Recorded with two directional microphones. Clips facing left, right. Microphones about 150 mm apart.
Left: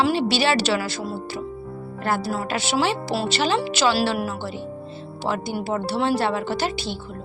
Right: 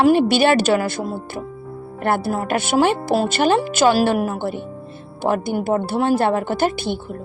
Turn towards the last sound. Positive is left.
turn(degrees=-55)  # may be behind; listen again after turning